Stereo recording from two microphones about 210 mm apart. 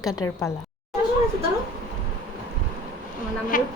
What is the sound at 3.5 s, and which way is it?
Speech, 40° left (ahead or behind).